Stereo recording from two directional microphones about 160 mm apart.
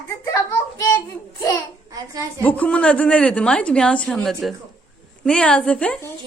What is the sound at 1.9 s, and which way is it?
Speech, 20° right (ahead or behind).